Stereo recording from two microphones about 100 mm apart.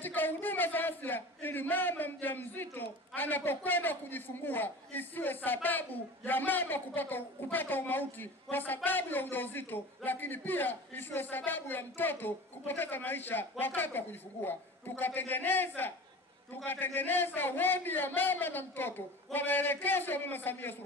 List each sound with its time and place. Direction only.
0.0 s a woman's voice: 20° left (ahead or behind)